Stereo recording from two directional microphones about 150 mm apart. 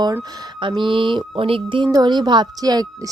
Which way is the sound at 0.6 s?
35° right (ahead or behind).